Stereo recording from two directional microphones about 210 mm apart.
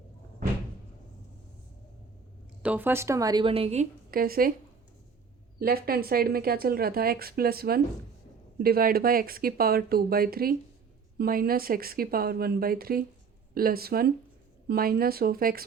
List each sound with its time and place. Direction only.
2.6 s a woman's voice: 10° right (ahead or behind); by 4.5 s 45° right (ahead or behind)
5.5 s speech: 45° right (ahead or behind)